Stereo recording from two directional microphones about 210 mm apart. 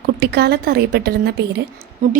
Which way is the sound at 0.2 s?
50° right (ahead or behind).